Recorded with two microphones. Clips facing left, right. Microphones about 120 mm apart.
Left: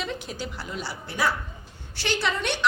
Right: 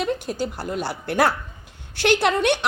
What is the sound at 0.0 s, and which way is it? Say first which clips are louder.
A woman's voice: right 8 dB; 50° right (ahead or behind).